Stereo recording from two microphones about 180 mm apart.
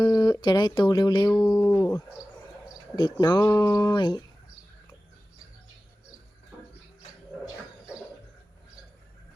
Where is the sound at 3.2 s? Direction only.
20° left (ahead or behind).